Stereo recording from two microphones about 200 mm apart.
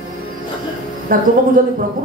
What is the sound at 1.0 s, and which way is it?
Speech, 45° right (ahead or behind).